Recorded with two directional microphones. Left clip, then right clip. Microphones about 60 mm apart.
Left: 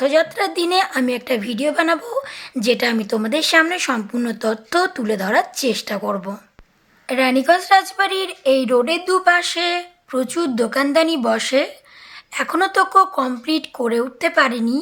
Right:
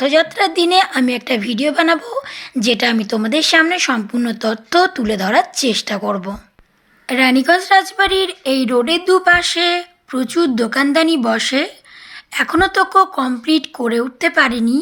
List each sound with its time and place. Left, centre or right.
0.0 s speech: right
2.0 s speech: centre
3.7 s speech: centre